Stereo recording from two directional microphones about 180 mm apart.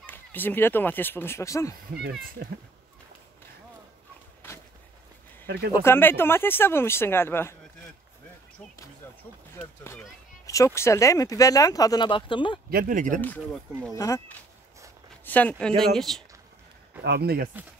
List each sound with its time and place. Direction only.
0.0 s speech: 10° left (ahead or behind)
4.4 s walk: 10° left (ahead or behind)
5.7 s speech: 15° left (ahead or behind)
9.6 s speech: 10° left (ahead or behind); by 12.5 s 25° left (ahead or behind)
12.6 s speech: 50° right (ahead or behind)
13.9 s speech: 20° left (ahead or behind)
15.2 s speech: 10° left (ahead or behind)
17.0 s speech: 65° right (ahead or behind)